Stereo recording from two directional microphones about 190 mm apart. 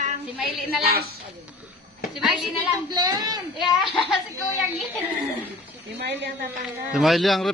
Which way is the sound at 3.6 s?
Centre (ahead or behind).